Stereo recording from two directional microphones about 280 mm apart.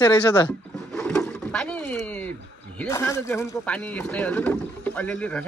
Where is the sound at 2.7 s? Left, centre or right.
Centre.